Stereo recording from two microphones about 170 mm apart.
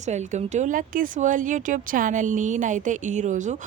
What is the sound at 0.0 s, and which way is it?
Speech, 45° right (ahead or behind).